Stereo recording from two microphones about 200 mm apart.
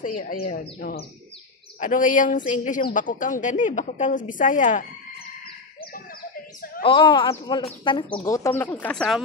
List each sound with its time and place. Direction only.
0.5 s a woman's voice: 50° left (ahead or behind)
6.8 s speech: 25° left (ahead or behind); by 9.0 s 10° left (ahead or behind)